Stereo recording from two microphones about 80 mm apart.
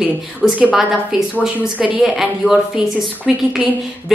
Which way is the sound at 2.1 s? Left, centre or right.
Centre.